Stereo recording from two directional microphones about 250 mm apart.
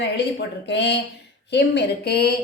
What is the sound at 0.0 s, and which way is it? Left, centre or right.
A woman's voice, left.